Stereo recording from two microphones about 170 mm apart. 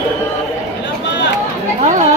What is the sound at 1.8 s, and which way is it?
Chatter, 45° right (ahead or behind).